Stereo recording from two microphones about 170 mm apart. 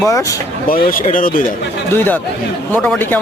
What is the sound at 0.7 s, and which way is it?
Speech, 55° left (ahead or behind).